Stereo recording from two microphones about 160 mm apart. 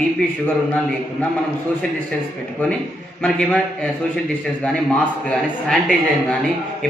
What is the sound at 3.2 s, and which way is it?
Speech, 10° left (ahead or behind).